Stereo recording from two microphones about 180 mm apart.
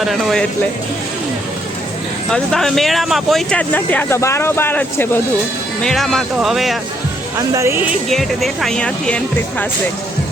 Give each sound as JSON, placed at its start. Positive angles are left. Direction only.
{"t": 0.0, "sound": "speech", "side_deg": 0}
{"t": 2.3, "sound": "speech", "side_deg": 0}
{"t": 7.3, "sound": "speech", "side_deg": -15}
{"t": 8.1, "sound": "speech", "side_deg": 0}